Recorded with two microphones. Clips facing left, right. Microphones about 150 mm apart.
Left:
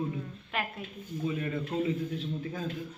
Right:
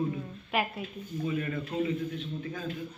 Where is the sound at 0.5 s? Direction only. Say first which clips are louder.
Right 5 dB; 10° right (ahead or behind).